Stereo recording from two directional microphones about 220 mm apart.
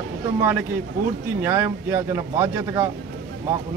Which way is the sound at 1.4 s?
10° right (ahead or behind).